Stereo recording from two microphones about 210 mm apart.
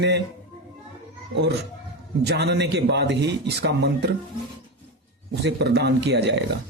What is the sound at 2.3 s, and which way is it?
Speech, 50° right (ahead or behind).